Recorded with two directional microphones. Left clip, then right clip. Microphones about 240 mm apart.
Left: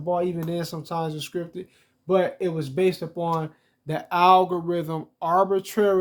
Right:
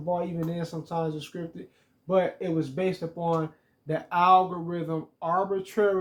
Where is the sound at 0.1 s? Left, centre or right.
Left.